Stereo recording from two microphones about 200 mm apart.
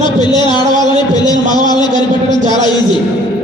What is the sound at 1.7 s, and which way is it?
Speech, 20° left (ahead or behind).